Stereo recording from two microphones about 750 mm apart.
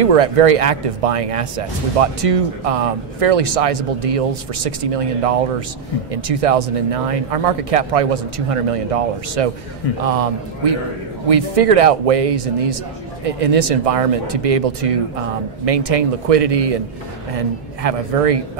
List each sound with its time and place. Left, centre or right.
0.0 s speech: right
17.8 s speech: right